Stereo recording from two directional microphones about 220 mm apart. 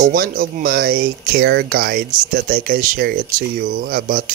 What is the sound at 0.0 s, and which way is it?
Speech, 40° right (ahead or behind).